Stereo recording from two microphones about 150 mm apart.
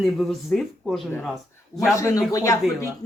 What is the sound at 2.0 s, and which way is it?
Speech, 20° left (ahead or behind).